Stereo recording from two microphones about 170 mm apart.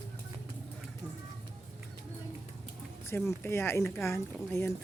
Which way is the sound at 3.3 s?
15° left (ahead or behind).